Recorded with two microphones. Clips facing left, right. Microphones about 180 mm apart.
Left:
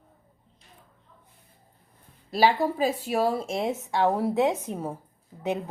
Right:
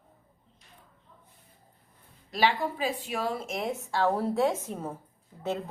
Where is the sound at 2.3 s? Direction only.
40° left (ahead or behind).